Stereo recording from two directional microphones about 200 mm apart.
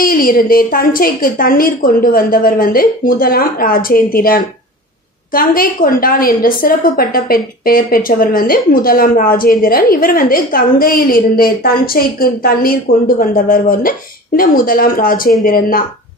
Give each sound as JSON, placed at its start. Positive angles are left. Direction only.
{"t": 0.0, "sound": "a woman's voice", "side_deg": 45}